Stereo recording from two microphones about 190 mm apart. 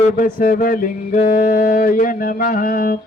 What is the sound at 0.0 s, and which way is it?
Mantra, 45° left (ahead or behind).